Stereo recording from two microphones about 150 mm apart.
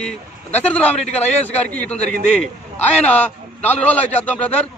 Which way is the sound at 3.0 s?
10° left (ahead or behind).